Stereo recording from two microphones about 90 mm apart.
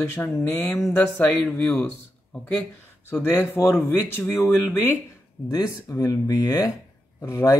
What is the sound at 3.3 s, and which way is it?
Speech, 25° left (ahead or behind).